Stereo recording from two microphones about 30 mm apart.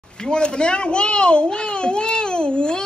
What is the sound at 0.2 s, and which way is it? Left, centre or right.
A child's voice, left.